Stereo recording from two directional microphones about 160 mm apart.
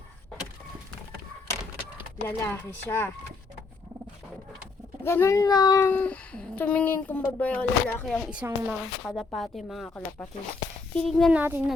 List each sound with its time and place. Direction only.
2.2 s speech: 15° left (ahead or behind)
5.0 s a child's voice: 15° left (ahead or behind)
5.9 s speech: 10° left (ahead or behind)
8.3 s a woman's voice: 10° right (ahead or behind)
9.0 s speech: centre (ahead or behind)
10.9 s speech: centre (ahead or behind)
11.3 s a woman's voice: 10° right (ahead or behind)